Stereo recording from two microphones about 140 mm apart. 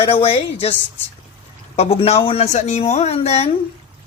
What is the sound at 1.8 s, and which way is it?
Speech, 45° left (ahead or behind).